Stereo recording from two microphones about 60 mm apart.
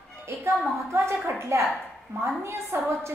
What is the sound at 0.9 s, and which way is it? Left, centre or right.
A woman's voice, right.